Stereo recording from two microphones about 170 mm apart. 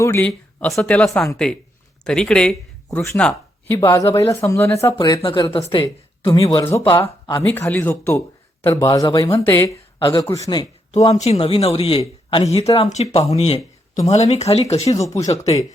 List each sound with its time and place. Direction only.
0.0 s speech: 10° left (ahead or behind)
4.9 s speech: 25° left (ahead or behind)
6.2 s speech: 20° left (ahead or behind)
10.0 s speech: 30° left (ahead or behind)
10.2 s speech: 20° left (ahead or behind)
11.2 s speech: 35° left (ahead or behind)
14.8 s speech: 20° left (ahead or behind)